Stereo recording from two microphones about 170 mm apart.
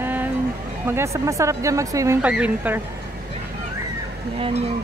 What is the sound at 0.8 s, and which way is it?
Speech, 15° right (ahead or behind).